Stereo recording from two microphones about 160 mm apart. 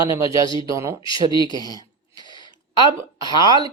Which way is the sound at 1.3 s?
30° left (ahead or behind).